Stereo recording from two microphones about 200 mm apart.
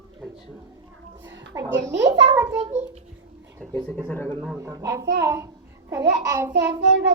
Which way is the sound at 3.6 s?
10° left (ahead or behind).